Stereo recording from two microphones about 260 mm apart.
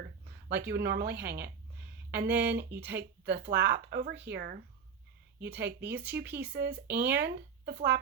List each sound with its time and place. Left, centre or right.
0.5 s speech: right
5.8 s speech: centre
6.3 s speech: right